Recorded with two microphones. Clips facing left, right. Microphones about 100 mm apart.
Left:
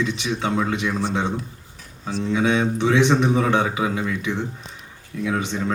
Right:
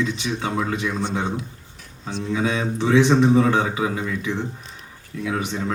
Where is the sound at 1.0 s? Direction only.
Centre (ahead or behind).